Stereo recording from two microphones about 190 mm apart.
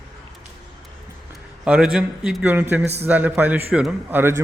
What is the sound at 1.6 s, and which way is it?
Speech, 5° right (ahead or behind).